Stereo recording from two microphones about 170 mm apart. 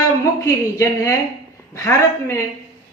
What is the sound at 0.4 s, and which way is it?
Speech, 15° left (ahead or behind).